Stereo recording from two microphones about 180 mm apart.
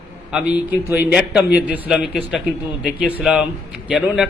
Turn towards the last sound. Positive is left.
turn(degrees=-5)  # may be behind; listen again after turning